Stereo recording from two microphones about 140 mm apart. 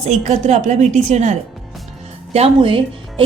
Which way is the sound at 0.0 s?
55° right (ahead or behind).